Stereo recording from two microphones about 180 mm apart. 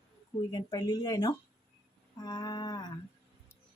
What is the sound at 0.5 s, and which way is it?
Speech, 25° left (ahead or behind).